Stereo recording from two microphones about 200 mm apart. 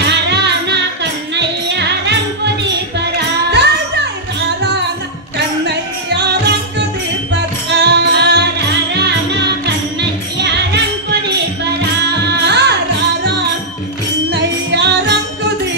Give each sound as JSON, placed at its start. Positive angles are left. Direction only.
{"t": 0.1, "sound": "music", "side_deg": -60}
{"t": 7.7, "sound": "music", "side_deg": -60}
{"t": 12.4, "sound": "music", "side_deg": -55}
{"t": 14.3, "sound": "music", "side_deg": -60}